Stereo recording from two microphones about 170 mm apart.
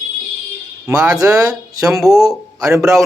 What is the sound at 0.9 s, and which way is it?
Speech, 5° right (ahead or behind).